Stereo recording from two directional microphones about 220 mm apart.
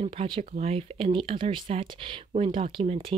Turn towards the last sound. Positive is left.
turn(degrees=-25)  # may be behind; listen again after turning